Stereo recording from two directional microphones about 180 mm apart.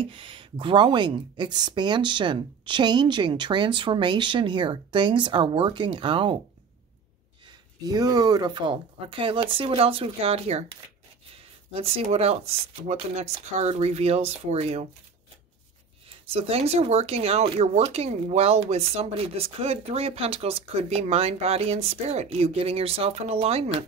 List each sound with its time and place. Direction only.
0.0 s speech: 30° right (ahead or behind)
7.4 s speech: 20° right (ahead or behind)
16.3 s speech: 35° right (ahead or behind)